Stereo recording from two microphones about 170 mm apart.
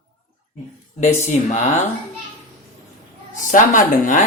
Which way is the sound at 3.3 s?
50° left (ahead or behind).